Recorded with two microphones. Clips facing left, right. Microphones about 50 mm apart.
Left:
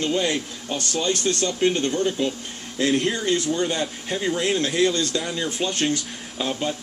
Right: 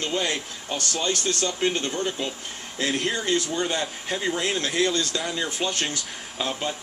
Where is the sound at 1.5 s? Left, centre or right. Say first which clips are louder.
Left 6 dB; centre.